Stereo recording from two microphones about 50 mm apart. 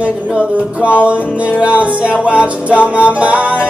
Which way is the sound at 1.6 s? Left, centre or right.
Right.